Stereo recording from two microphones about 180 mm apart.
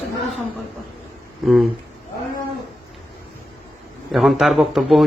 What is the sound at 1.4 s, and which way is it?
Speech, centre (ahead or behind).